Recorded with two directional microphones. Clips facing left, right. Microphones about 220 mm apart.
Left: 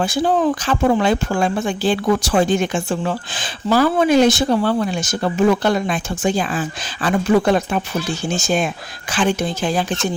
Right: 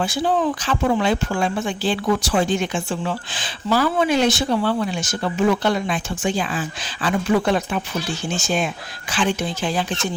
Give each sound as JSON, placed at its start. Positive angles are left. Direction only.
{"t": 0.0, "sound": "speech", "side_deg": 45}